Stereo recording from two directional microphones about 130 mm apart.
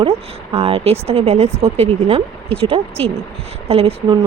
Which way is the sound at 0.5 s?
50° right (ahead or behind).